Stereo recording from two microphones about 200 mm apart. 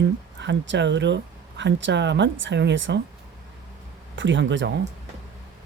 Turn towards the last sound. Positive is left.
turn(degrees=-65)  # may be behind; listen again after turning